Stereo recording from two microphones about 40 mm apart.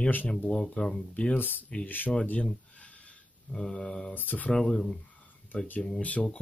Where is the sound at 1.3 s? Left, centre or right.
Left.